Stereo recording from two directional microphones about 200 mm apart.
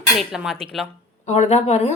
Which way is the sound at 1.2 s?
35° left (ahead or behind).